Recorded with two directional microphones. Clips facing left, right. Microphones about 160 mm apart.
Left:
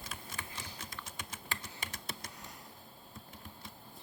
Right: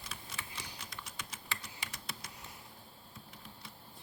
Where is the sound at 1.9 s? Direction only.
50° left (ahead or behind).